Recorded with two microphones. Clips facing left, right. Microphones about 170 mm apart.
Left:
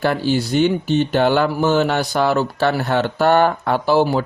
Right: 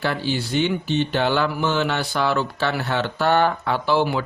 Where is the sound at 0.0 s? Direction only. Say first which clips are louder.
Left 6 dB; 45° left (ahead or behind).